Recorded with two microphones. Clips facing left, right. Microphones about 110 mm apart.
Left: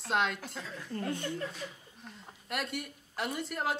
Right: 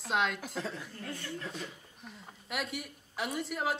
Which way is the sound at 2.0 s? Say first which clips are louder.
Even; centre (ahead or behind).